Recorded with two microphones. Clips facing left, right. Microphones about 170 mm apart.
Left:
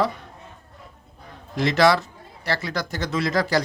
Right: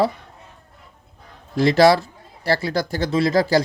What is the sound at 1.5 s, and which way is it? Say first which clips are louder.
Speech: right 4 dB; 35° right (ahead or behind).